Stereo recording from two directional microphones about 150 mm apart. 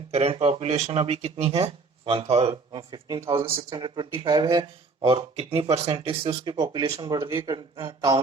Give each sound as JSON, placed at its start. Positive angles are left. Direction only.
{"t": 0.1, "sound": "speech", "side_deg": -45}